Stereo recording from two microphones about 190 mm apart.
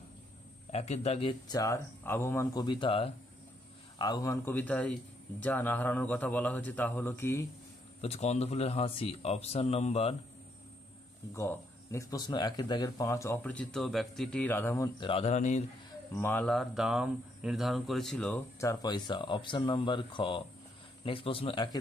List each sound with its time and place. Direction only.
0.7 s speech: 35° left (ahead or behind)
1.5 s speech: 15° left (ahead or behind)
8.0 s speech: 35° left (ahead or behind)
11.3 s speech: 15° left (ahead or behind)
15.0 s speech: 30° left (ahead or behind)
16.1 s speech: 10° left (ahead or behind); by 21.6 s 30° left (ahead or behind)